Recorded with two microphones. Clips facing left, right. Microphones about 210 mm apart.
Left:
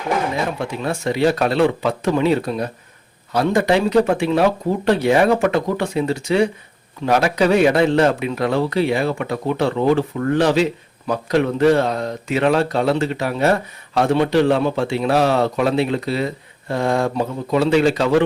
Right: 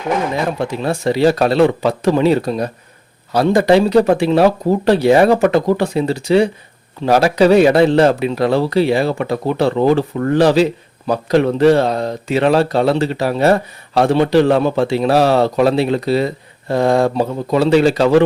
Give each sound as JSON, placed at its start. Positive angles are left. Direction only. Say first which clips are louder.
{"t": 0.8, "sound": "speech", "louder": "right 3 dB", "side_deg": -35}